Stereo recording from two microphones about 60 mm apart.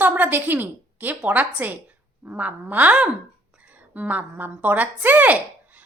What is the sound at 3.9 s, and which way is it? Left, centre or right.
Speech, right.